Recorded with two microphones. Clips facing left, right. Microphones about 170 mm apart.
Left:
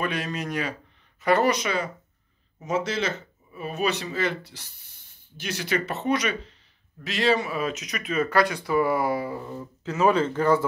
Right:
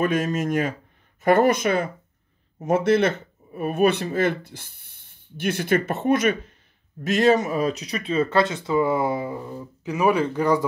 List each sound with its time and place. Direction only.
0.0 s speech: 45° right (ahead or behind); by 10.6 s 15° right (ahead or behind)